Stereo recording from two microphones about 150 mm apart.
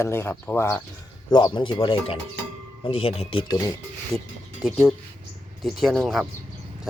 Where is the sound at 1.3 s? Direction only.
30° left (ahead or behind).